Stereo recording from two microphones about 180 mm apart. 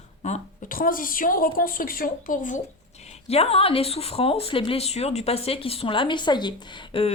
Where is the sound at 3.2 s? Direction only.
35° left (ahead or behind).